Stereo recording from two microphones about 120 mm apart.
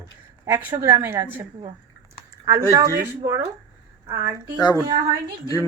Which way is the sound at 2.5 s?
30° right (ahead or behind).